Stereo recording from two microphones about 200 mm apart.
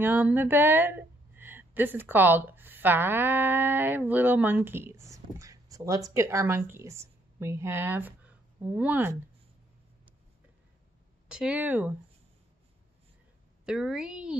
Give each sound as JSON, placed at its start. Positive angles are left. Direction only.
{"t": 0.0, "sound": "a woman's voice", "side_deg": -10}
{"t": 11.2, "sound": "speech", "side_deg": -5}
{"t": 13.7, "sound": "a woman's voice", "side_deg": -5}